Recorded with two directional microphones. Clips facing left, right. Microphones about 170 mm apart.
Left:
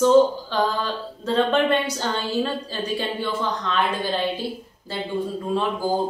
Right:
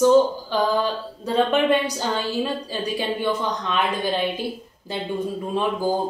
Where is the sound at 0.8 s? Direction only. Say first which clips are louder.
Right 2 dB; 15° right (ahead or behind).